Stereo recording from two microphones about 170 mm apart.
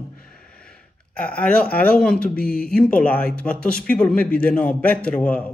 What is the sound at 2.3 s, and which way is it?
Speech, 60° left (ahead or behind).